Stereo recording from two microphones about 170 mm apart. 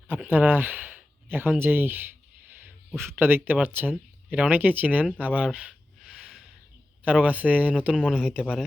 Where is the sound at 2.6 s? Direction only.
10° right (ahead or behind).